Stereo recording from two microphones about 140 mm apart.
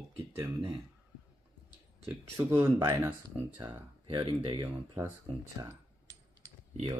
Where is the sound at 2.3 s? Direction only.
20° right (ahead or behind).